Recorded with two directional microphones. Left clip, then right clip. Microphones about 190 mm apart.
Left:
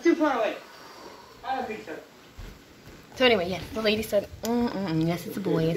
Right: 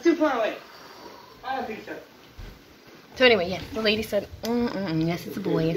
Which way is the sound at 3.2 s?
Centre (ahead or behind).